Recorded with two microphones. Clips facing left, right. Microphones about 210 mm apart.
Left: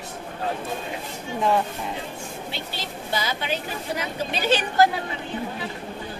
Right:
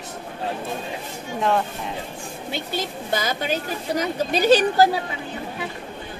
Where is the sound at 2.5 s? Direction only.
45° right (ahead or behind).